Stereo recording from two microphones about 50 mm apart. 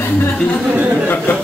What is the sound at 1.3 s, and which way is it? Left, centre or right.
Speech, left.